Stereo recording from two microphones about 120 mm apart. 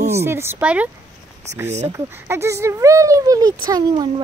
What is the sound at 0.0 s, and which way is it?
Speech, 20° right (ahead or behind).